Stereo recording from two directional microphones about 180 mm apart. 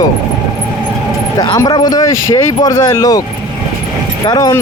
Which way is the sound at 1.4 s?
20° left (ahead or behind).